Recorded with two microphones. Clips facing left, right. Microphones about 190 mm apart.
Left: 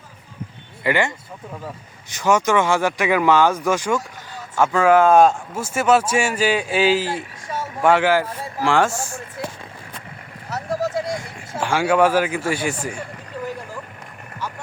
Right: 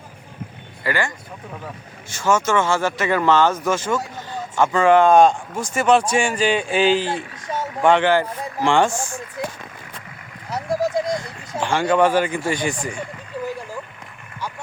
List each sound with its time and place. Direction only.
0.9 s speech: 20° left (ahead or behind); by 7.1 s 5° left (ahead or behind)
7.4 s vehicle: 20° right (ahead or behind)
7.8 s speech: 5° left (ahead or behind)
10.5 s vehicle: 15° right (ahead or behind)
11.6 s speech: 5° left (ahead or behind)